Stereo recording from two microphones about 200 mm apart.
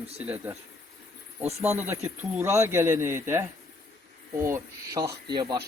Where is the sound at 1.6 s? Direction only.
10° right (ahead or behind).